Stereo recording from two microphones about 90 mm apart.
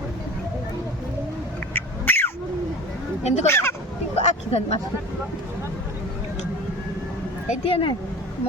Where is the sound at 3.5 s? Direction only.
25° left (ahead or behind).